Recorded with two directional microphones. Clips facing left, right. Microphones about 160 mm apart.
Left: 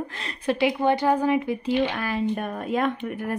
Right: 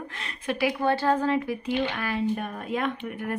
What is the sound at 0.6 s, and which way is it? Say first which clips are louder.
Speech: left 2 dB; 15° left (ahead or behind).